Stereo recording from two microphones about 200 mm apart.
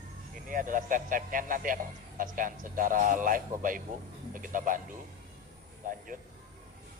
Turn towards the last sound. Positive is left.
turn(degrees=-40)  # may be behind; listen again after turning